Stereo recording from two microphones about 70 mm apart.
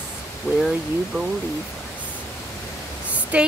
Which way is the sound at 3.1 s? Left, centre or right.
Centre.